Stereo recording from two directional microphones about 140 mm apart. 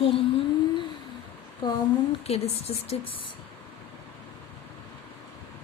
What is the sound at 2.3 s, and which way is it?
Speech, 45° left (ahead or behind).